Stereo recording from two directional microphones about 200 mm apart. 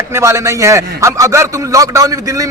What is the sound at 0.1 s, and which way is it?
A man's voice, 15° right (ahead or behind).